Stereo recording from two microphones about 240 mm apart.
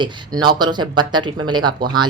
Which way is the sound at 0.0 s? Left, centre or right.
Centre.